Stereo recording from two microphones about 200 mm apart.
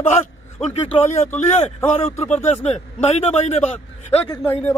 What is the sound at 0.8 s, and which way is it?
Speech, 10° left (ahead or behind).